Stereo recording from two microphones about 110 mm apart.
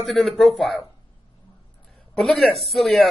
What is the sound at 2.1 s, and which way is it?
Speech, centre (ahead or behind).